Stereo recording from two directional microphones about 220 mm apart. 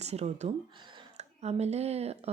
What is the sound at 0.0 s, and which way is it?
Speech, 30° right (ahead or behind).